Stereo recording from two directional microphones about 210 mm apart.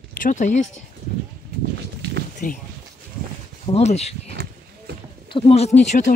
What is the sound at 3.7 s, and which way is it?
Speech, 30° left (ahead or behind).